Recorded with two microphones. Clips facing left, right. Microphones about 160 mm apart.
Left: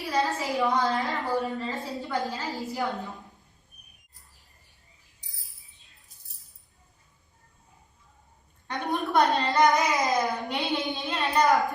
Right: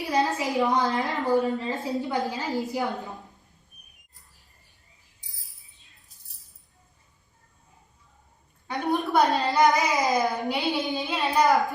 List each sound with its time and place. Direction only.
0.1 s a woman's voice: 20° right (ahead or behind)
8.6 s a woman's voice: centre (ahead or behind)